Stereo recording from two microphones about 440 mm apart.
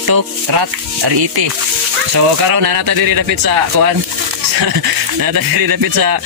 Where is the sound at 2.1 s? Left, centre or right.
Right.